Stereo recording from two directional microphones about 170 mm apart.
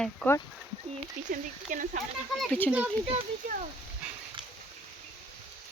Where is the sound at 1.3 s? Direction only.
50° right (ahead or behind).